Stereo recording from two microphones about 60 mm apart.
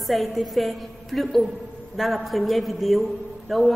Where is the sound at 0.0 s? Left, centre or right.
Centre.